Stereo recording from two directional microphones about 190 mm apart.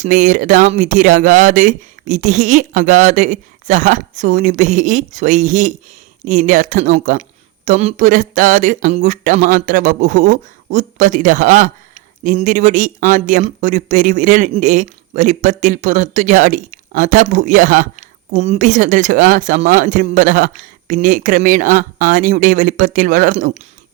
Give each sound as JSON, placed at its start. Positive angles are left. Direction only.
{"t": 0.0, "sound": "speech", "side_deg": -40}